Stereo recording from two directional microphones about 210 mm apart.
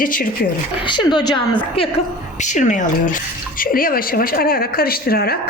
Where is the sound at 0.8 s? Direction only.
20° left (ahead or behind).